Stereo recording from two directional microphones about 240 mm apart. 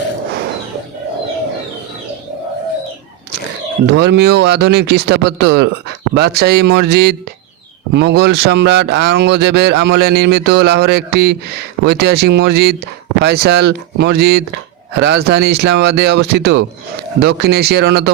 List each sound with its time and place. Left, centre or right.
3.9 s speech: right